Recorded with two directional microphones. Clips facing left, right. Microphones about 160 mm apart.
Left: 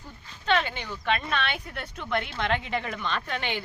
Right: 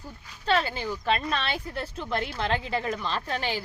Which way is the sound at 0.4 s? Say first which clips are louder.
Even; 35° right (ahead or behind).